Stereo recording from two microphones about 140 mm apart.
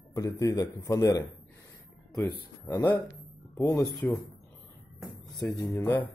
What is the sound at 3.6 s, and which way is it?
Speech, 25° left (ahead or behind).